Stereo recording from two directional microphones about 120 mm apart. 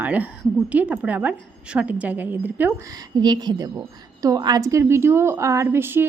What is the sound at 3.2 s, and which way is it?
A woman's voice, 35° right (ahead or behind).